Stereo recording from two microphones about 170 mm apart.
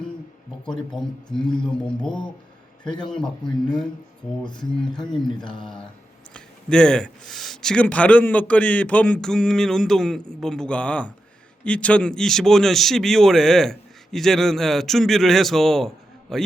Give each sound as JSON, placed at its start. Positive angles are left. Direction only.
{"t": 0.6, "sound": "speech", "side_deg": 5}
{"t": 2.0, "sound": "speech", "side_deg": 25}
{"t": 3.1, "sound": "speech", "side_deg": 5}
{"t": 4.5, "sound": "speech", "side_deg": 5}
{"t": 5.4, "sound": "speech", "side_deg": 25}
{"t": 6.3, "sound": "speech", "side_deg": 5}